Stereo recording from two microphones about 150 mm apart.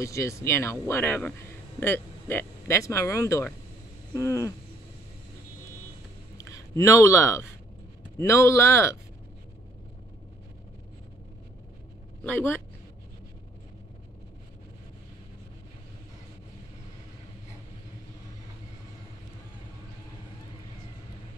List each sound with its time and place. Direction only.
0.0 s speech: 20° left (ahead or behind)
6.3 s speech: 20° left (ahead or behind)
12.2 s speech: 15° left (ahead or behind)